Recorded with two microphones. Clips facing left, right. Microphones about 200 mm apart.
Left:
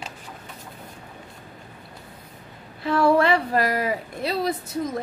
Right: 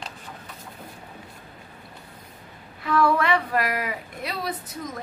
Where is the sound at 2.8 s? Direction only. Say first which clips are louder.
Left 3 dB; 30° left (ahead or behind).